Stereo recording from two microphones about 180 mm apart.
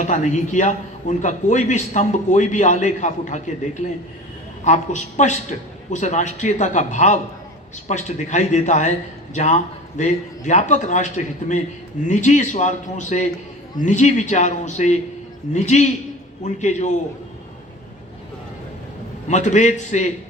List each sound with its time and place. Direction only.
0.0 s a man's voice: 40° left (ahead or behind)
19.3 s a man's voice: 40° left (ahead or behind)